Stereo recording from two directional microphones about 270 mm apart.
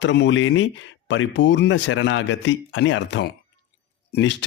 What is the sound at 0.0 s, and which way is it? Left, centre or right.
Speech, left.